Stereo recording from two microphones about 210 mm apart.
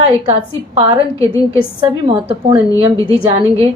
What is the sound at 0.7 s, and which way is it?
Speech, 25° right (ahead or behind).